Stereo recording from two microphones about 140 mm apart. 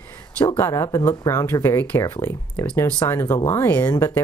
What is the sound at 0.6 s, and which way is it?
Speech, 20° left (ahead or behind).